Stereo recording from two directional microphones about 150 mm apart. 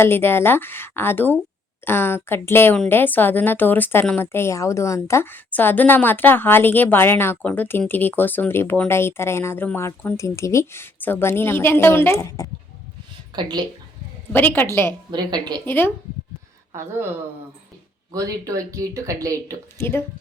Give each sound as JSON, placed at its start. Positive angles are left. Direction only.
{"t": 0.0, "sound": "a woman's voice", "side_deg": 15}
{"t": 13.3, "sound": "speech", "side_deg": -30}
{"t": 14.3, "sound": "a woman's voice", "side_deg": 10}
{"t": 15.1, "sound": "speech", "side_deg": -30}
{"t": 15.6, "sound": "a woman's voice", "side_deg": 15}
{"t": 18.1, "sound": "speech", "side_deg": -25}
{"t": 19.8, "sound": "a woman's voice", "side_deg": 15}